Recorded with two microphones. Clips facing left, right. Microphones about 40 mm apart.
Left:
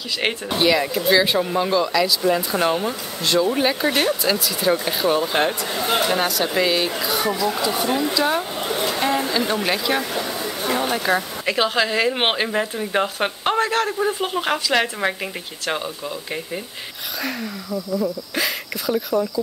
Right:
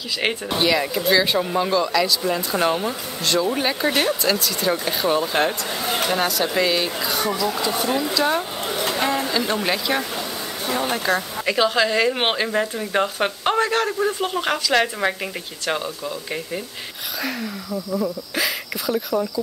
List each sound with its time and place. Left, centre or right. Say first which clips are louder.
0.2 s speech: left 1 dB; centre
10.1 s a sound: left 3 dB; centre
11.0 s speech: left 1 dB; centre
12.4 s speech: even; centre
17.2 s speech: even; centre